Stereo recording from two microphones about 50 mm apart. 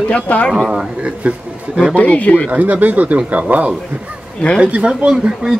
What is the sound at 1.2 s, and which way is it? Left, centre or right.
Speech, right.